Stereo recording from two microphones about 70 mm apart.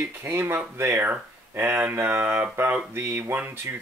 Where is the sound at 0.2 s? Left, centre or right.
Right.